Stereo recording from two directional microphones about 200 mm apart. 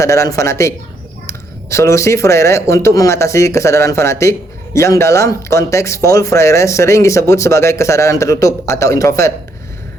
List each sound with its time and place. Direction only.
0.0 s speech: 15° left (ahead or behind)